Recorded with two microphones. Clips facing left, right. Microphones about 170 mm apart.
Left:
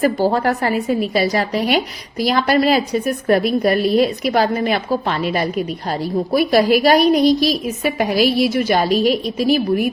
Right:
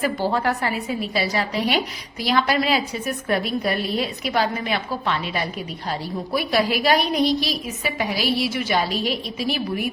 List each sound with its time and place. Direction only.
0.0 s a woman's voice: 40° left (ahead or behind)